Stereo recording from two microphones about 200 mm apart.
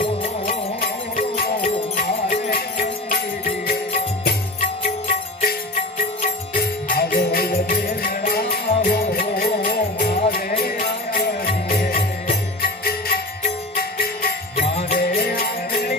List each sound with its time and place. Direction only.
0.4 s music: 45° left (ahead or behind)
5.0 s music: 50° left (ahead or behind)